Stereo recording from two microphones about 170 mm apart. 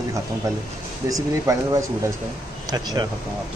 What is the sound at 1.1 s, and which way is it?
Speech, 20° right (ahead or behind).